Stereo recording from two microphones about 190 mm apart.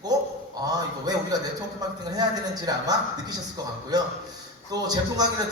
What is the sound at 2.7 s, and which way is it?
Speech, 20° right (ahead or behind).